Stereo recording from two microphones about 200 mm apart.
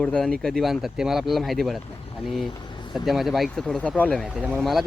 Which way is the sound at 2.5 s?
25° left (ahead or behind).